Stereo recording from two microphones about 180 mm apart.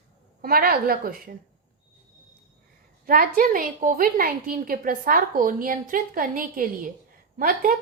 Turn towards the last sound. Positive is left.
turn(degrees=-50)  # may be behind; listen again after turning